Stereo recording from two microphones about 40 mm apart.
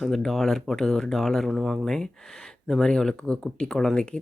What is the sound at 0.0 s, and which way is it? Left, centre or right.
Speech, centre.